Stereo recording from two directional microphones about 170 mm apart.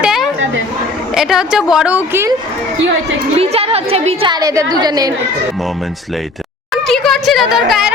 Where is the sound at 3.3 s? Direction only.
35° right (ahead or behind).